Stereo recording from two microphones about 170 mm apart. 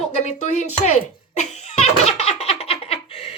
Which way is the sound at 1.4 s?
40° left (ahead or behind).